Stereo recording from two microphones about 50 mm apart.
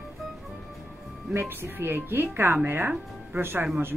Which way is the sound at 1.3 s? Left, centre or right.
Right.